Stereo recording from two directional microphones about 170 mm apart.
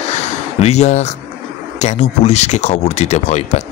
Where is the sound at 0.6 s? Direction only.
40° left (ahead or behind).